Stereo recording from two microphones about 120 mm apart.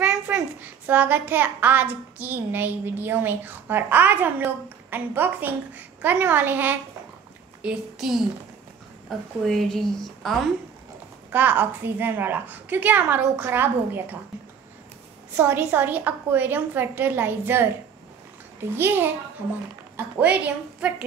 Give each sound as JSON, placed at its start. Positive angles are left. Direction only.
{"t": 0.0, "sound": "a child's voice", "side_deg": -10}
{"t": 7.6, "sound": "a child's voice", "side_deg": -5}
{"t": 9.4, "sound": "a child's voice", "side_deg": 5}
{"t": 11.3, "sound": "a child's voice", "side_deg": -15}
{"t": 15.3, "sound": "a child's voice", "side_deg": -20}
{"t": 18.8, "sound": "a child's voice", "side_deg": -20}
{"t": 20.2, "sound": "a child's voice", "side_deg": -10}